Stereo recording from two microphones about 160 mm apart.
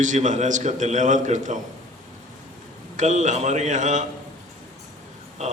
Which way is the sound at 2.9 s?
50° right (ahead or behind).